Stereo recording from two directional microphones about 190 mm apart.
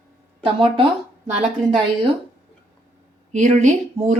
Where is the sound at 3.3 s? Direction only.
40° right (ahead or behind).